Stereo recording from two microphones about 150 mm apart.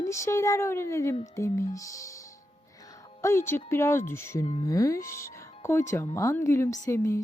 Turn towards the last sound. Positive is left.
turn(degrees=20)  # may be behind; listen again after turning